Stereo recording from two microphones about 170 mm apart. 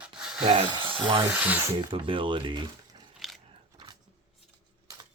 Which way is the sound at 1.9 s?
30° right (ahead or behind).